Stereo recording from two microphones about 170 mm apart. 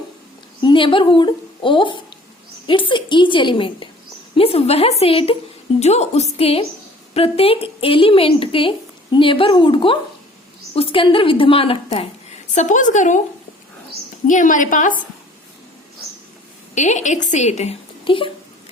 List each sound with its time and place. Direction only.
0.6 s a woman's voice: 30° left (ahead or behind)
12.5 s a woman's voice: 45° left (ahead or behind)
14.3 s a woman's voice: 50° left (ahead or behind)
16.7 s a woman's voice: 45° left (ahead or behind)